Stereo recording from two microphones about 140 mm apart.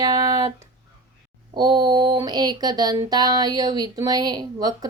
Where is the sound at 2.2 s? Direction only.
30° right (ahead or behind).